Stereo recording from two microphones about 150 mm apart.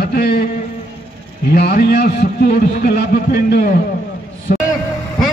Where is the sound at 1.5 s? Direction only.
80° left.